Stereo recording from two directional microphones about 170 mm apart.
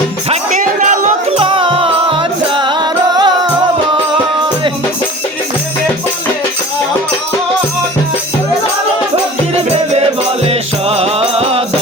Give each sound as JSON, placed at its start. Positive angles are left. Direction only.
{"t": 0.3, "sound": "music", "side_deg": -45}
{"t": 1.4, "sound": "music", "side_deg": -30}
{"t": 10.4, "sound": "music", "side_deg": -35}